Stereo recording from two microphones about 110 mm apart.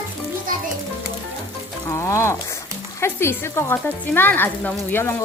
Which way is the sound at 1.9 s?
30° left (ahead or behind).